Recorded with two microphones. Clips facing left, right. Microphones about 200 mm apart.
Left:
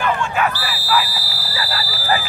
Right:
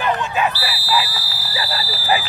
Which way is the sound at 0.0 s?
15° right (ahead or behind).